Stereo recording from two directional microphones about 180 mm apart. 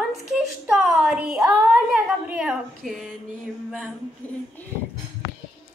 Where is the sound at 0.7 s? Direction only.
5° right (ahead or behind).